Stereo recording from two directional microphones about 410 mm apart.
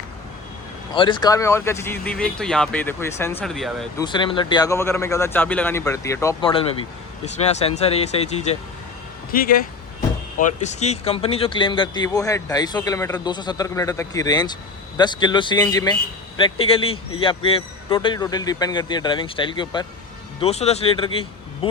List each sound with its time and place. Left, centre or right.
0.9 s speech: centre